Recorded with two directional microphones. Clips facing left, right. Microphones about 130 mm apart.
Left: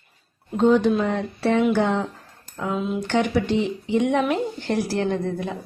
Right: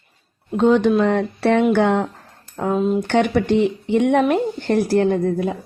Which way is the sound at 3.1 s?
60° right (ahead or behind).